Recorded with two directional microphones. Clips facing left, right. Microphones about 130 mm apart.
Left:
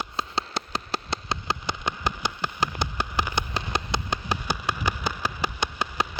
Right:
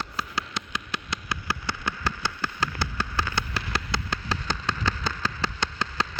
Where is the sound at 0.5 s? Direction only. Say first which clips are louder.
Left 3 dB; 35° left (ahead or behind).